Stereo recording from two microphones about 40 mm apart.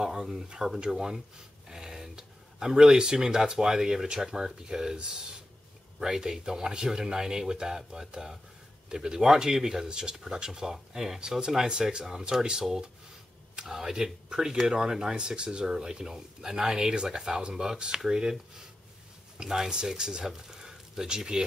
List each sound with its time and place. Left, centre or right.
0.0 s speech: centre
5.9 s speech: centre
13.7 s speech: centre